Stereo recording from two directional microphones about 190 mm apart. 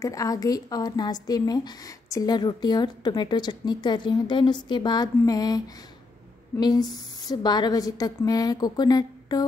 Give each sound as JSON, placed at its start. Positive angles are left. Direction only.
{"t": 0.0, "sound": "a woman's voice", "side_deg": 15}